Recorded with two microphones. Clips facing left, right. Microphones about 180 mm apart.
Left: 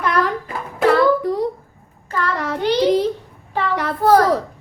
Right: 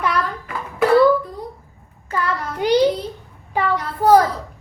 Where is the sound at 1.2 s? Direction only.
90° left.